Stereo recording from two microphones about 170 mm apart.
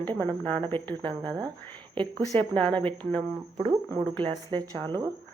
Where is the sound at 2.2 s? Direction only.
10° left (ahead or behind).